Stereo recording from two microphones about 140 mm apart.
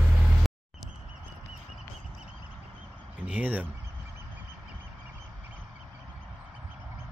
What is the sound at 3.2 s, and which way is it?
Speech, 10° right (ahead or behind).